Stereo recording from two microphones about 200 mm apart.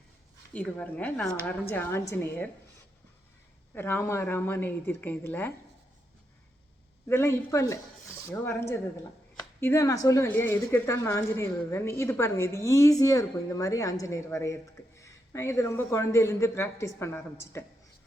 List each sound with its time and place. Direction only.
0.5 s speech: 5° left (ahead or behind)
3.8 s speech: 10° left (ahead or behind)
7.1 s speech: 15° left (ahead or behind)